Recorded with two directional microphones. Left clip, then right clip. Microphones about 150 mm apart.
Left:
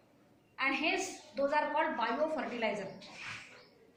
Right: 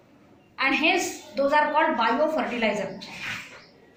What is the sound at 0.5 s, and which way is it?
A woman's voice, 15° left (ahead or behind).